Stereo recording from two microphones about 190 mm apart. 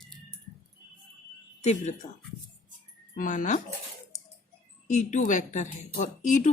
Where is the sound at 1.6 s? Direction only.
40° left (ahead or behind).